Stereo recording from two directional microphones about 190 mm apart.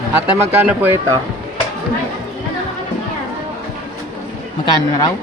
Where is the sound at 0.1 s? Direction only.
10° right (ahead or behind).